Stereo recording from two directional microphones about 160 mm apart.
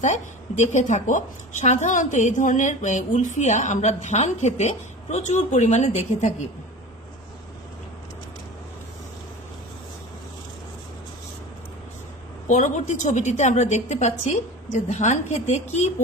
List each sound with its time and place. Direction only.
0.0 s a woman's voice: 45° left (ahead or behind)
12.4 s a woman's voice: 50° left (ahead or behind)